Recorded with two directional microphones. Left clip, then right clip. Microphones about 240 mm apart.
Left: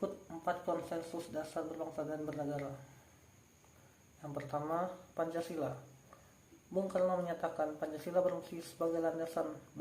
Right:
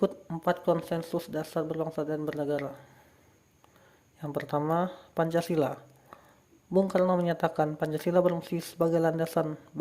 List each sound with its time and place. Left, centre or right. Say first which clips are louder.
0.0 s speech: right 10 dB; right
4.2 s speech: right 9 dB; right
6.7 s speech: right 8 dB; right